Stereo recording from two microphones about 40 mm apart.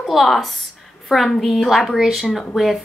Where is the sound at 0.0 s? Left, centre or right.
Centre.